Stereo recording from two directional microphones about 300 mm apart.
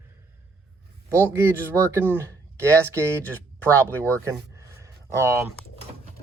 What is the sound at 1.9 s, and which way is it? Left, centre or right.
Speech, centre.